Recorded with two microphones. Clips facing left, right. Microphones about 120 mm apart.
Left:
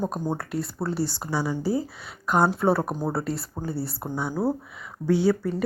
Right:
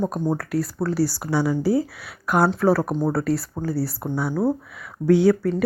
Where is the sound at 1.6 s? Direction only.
10° right (ahead or behind).